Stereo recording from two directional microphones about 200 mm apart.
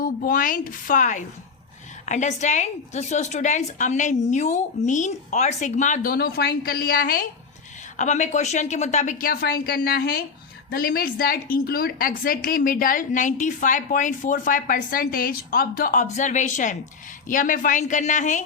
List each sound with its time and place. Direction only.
0.0 s a woman's voice: 45° left (ahead or behind)